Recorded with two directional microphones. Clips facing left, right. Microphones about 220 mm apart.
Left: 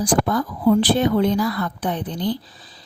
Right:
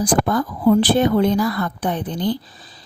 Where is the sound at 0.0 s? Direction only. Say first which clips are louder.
Right 1 dB; 50° right (ahead or behind).